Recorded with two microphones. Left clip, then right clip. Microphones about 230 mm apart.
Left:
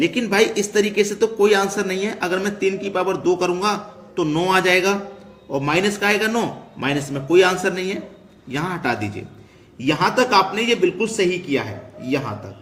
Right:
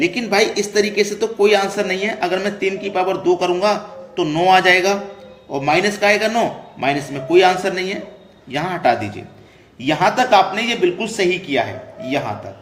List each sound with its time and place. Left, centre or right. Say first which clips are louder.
0.0 s speech: right 1 dB; left